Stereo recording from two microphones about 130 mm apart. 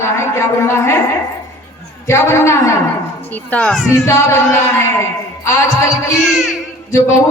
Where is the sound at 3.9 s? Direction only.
20° left (ahead or behind).